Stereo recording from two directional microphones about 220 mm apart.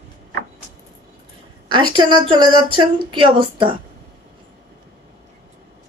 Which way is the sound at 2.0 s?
20° right (ahead or behind).